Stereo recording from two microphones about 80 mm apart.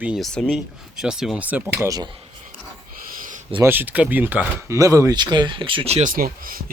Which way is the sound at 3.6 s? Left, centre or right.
Right.